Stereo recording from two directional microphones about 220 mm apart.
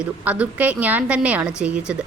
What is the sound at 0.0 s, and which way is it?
A woman's voice, 5° right (ahead or behind).